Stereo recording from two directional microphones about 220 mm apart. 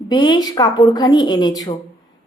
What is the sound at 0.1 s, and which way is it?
A woman's voice, 20° left (ahead or behind).